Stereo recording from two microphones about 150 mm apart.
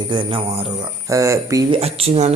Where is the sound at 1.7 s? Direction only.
40° right (ahead or behind).